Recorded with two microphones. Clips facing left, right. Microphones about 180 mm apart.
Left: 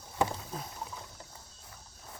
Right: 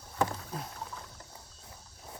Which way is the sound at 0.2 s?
5° left (ahead or behind).